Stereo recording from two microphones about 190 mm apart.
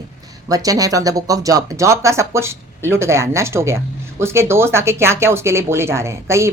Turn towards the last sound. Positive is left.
turn(degrees=-15)  # may be behind; listen again after turning